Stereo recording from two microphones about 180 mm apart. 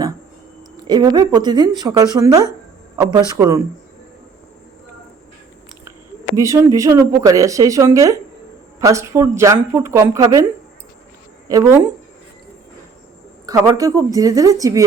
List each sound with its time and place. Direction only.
0.9 s a woman's voice: 25° right (ahead or behind)
6.3 s speech: 15° right (ahead or behind)
11.4 s a woman's voice: 20° right (ahead or behind)
13.4 s a woman's voice: 20° right (ahead or behind)